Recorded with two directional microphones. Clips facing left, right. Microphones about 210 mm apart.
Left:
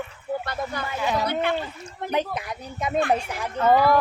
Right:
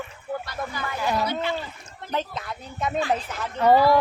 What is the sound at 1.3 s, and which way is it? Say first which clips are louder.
Speech: left 3 dB; 55° left (ahead or behind).